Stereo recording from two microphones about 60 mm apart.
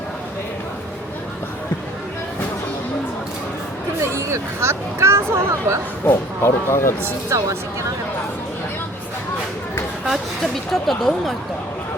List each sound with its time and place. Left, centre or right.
4.0 s speech: right
6.1 s speech: left
7.3 s speech: right
10.1 s speech: centre